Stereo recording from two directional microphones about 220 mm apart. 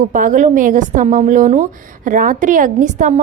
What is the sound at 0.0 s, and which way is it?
Speech, 35° right (ahead or behind).